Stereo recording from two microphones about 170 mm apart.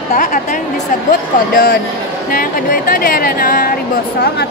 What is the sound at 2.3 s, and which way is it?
A woman's voice, 55° left (ahead or behind).